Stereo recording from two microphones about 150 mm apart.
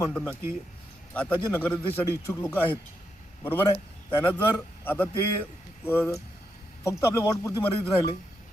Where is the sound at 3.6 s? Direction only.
40° left (ahead or behind).